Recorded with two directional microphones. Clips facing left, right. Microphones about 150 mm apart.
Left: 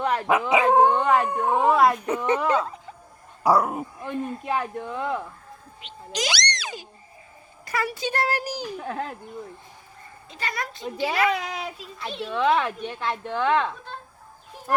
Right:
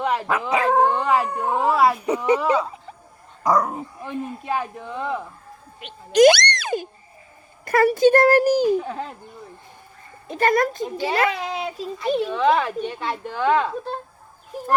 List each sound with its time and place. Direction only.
0.0 s dog: 5° right (ahead or behind)
0.4 s speech: centre (ahead or behind)
3.4 s speech: 5° left (ahead or behind)
5.8 s a child's voice: 55° right (ahead or behind)
8.8 s speech: centre (ahead or behind)
10.2 s a child's voice: 50° right (ahead or behind)
11.1 s a child's voice: 30° right (ahead or behind)
12.3 s speech: centre (ahead or behind)